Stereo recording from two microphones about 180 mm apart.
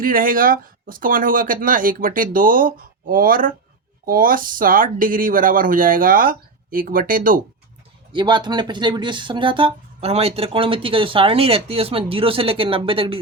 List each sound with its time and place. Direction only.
0.0 s speech: 50° right (ahead or behind)
8.1 s speech: 25° right (ahead or behind)